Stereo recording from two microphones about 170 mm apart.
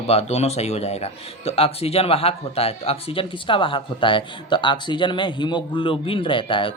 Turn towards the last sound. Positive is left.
turn(degrees=30)  # may be behind; listen again after turning